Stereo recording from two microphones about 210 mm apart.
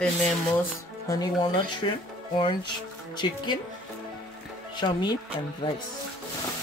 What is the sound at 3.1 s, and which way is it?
Speech, 20° left (ahead or behind).